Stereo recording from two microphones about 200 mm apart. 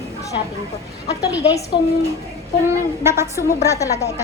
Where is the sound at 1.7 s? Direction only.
25° left (ahead or behind).